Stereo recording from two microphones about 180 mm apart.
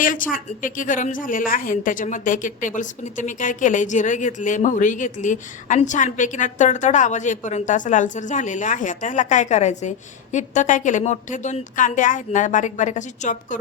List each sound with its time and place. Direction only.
0.0 s a woman's voice: 50° left (ahead or behind)